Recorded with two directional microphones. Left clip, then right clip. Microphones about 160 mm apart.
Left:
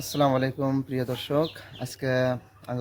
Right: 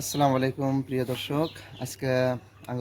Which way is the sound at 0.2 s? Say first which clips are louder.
Left 1 dB; 25° left (ahead or behind).